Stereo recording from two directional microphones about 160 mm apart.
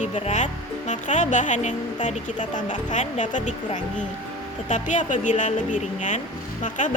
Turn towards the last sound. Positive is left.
turn(degrees=50)  # may be behind; listen again after turning